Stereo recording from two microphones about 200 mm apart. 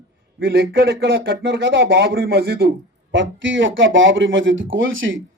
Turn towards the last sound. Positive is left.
turn(degrees=-70)  # may be behind; listen again after turning